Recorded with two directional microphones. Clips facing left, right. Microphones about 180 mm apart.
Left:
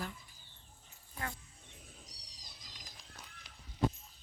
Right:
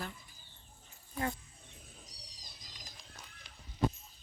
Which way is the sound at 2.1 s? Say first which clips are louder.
Right 3 dB; 65° left (ahead or behind).